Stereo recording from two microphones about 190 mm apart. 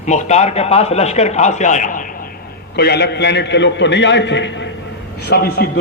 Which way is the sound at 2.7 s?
60° left (ahead or behind).